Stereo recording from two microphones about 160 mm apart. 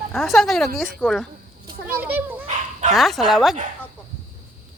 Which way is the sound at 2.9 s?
Centre (ahead or behind).